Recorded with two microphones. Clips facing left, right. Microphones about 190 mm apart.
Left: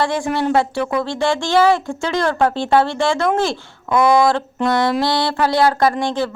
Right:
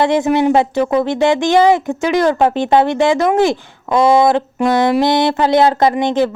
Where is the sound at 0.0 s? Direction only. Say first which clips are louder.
Right 6 dB; 20° right (ahead or behind).